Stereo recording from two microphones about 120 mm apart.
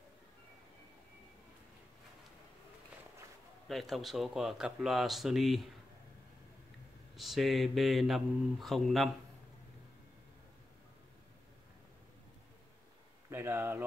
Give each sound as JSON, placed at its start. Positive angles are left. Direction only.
{"t": 3.6, "sound": "speech", "side_deg": 0}
{"t": 7.2, "sound": "speech", "side_deg": 0}
{"t": 13.3, "sound": "a sound", "side_deg": -20}